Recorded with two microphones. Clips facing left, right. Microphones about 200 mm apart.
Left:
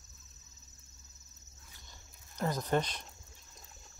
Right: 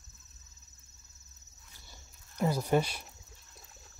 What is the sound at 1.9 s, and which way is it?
Cricket, 10° right (ahead or behind).